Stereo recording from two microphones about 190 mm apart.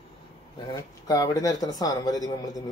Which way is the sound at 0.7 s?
20° left (ahead or behind).